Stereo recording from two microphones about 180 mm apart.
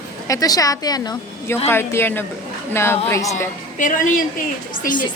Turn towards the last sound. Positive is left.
turn(degrees=50)  # may be behind; listen again after turning